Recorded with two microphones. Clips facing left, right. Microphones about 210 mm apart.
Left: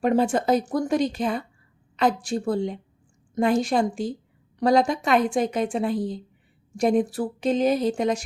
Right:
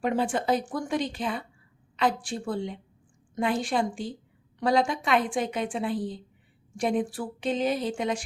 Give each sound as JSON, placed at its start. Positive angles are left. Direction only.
{"t": 0.0, "sound": "a woman's voice", "side_deg": 40}